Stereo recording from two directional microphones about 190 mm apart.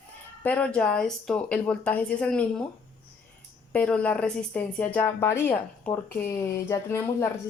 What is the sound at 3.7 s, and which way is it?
Speech, 5° left (ahead or behind).